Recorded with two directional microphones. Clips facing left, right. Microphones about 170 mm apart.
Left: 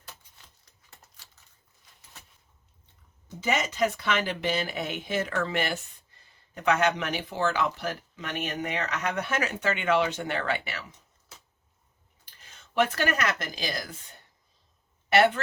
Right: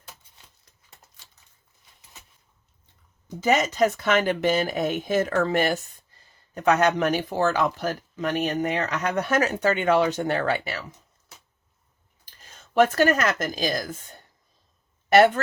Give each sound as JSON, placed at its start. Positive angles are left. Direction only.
{"t": 3.4, "sound": "speech", "side_deg": -40}
{"t": 12.2, "sound": "speech", "side_deg": -40}
{"t": 15.1, "sound": "speech", "side_deg": -40}